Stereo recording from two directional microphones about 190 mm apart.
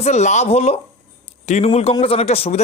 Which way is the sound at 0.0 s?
35° left (ahead or behind).